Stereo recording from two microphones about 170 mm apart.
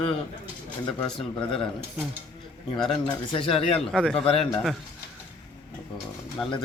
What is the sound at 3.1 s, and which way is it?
Speech, 30° left (ahead or behind).